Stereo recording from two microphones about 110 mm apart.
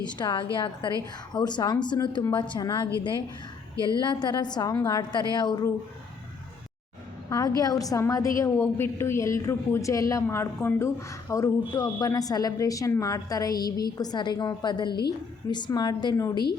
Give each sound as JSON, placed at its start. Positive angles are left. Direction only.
{"t": 0.0, "sound": "a woman's voice", "side_deg": 40}
{"t": 3.8, "sound": "a woman's voice", "side_deg": -30}
{"t": 4.0, "sound": "a woman's voice", "side_deg": 40}
{"t": 7.3, "sound": "a woman's voice", "side_deg": 30}
{"t": 11.7, "sound": "a woman's voice", "side_deg": 45}